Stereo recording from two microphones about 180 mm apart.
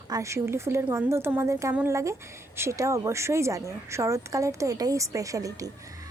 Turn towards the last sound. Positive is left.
turn(degrees=-20)  # may be behind; listen again after turning